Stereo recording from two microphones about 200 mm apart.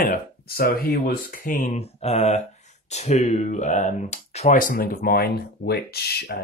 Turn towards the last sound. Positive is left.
turn(degrees=50)  # may be behind; listen again after turning